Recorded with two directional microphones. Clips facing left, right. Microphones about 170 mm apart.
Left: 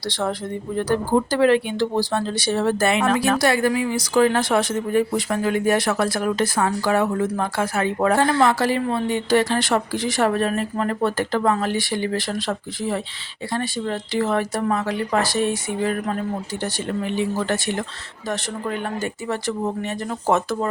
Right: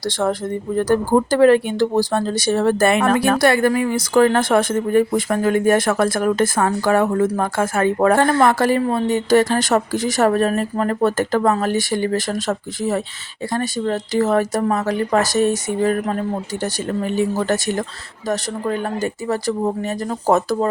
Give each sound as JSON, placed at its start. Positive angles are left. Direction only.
{"t": 0.0, "sound": "speech", "side_deg": -45}